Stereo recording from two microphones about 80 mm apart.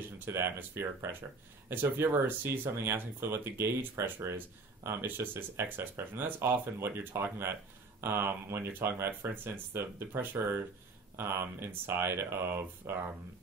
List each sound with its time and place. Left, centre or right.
0.2 s speech: right